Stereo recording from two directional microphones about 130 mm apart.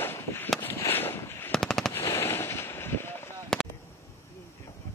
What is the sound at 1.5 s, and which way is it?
Machine gun, 5° left (ahead or behind).